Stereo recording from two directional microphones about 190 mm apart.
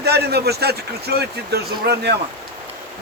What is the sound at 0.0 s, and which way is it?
A man's voice, 60° right (ahead or behind).